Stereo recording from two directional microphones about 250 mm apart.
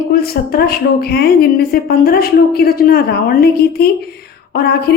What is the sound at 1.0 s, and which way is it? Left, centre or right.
A woman's voice, left.